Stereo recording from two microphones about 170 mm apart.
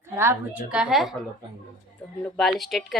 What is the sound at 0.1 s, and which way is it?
A woman's voice, 15° right (ahead or behind).